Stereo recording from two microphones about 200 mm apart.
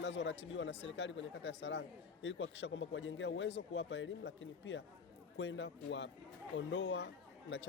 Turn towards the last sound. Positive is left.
turn(degrees=55)  # may be behind; listen again after turning